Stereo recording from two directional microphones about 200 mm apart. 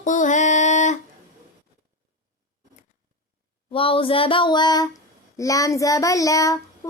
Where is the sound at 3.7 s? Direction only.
25° left (ahead or behind).